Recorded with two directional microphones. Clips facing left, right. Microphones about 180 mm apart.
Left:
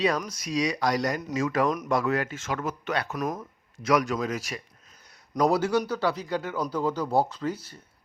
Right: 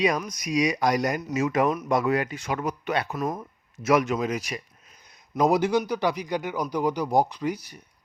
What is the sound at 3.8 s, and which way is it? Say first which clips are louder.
A man's voice: right 2 dB; 20° right (ahead or behind).